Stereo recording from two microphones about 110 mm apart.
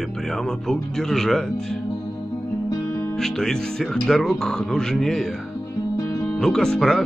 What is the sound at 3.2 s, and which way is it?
Speech, 5° left (ahead or behind).